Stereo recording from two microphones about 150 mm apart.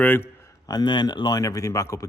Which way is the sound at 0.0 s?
15° left (ahead or behind).